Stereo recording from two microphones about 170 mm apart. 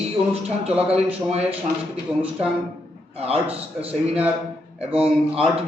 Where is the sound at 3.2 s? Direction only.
35° right (ahead or behind).